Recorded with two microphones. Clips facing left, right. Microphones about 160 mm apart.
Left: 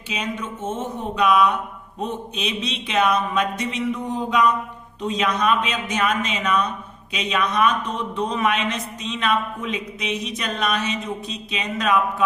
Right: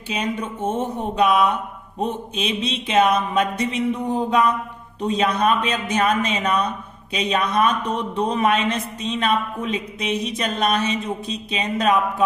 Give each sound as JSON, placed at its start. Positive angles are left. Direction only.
{"t": 0.1, "sound": "a woman's voice", "side_deg": -35}
{"t": 1.1, "sound": "mantra", "side_deg": -30}
{"t": 3.8, "sound": "a woman's voice", "side_deg": -30}